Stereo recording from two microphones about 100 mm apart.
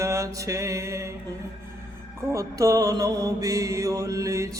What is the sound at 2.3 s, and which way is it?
Mantra, 35° right (ahead or behind).